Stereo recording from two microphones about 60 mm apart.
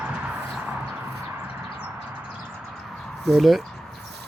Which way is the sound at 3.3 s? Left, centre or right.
Centre.